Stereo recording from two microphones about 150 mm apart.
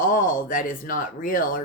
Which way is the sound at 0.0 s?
60° left (ahead or behind).